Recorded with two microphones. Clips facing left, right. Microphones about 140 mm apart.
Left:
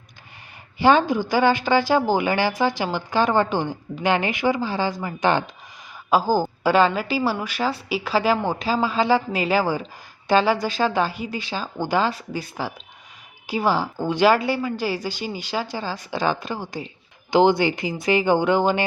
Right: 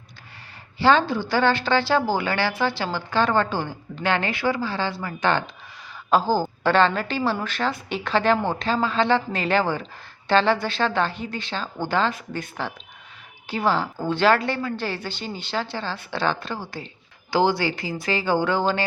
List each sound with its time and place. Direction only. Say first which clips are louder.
0.8 s a woman's voice: left 2 dB; 15° left (ahead or behind)